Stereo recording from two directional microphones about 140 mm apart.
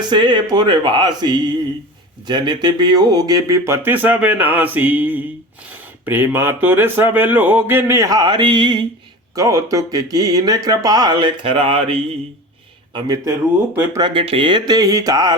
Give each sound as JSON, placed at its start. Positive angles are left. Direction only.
{"t": 0.1, "sound": "speech", "side_deg": -35}
{"t": 9.3, "sound": "speech", "side_deg": -25}
{"t": 12.9, "sound": "speech", "side_deg": -25}
{"t": 14.0, "sound": "speech", "side_deg": -40}